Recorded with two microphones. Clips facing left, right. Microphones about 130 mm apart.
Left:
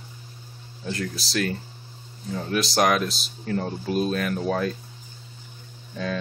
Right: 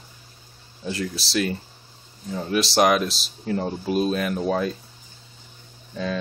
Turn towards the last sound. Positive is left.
turn(degrees=-5)  # may be behind; listen again after turning